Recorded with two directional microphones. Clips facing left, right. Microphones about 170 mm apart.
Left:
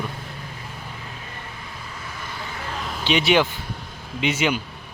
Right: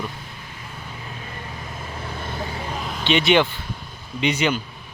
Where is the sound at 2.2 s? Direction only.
45° right (ahead or behind).